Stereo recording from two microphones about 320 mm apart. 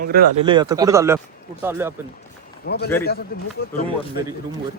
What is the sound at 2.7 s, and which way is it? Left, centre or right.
Speech, left.